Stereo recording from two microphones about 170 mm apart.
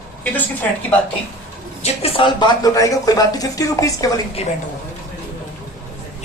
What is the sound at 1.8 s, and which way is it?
A woman's voice, 35° left (ahead or behind).